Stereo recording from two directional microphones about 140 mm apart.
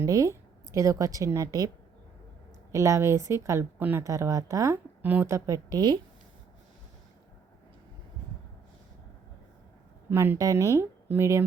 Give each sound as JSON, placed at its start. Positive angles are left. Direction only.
{"t": 0.0, "sound": "a woman's voice", "side_deg": -25}
{"t": 2.7, "sound": "a woman's voice", "side_deg": -20}
{"t": 10.1, "sound": "a woman's voice", "side_deg": -15}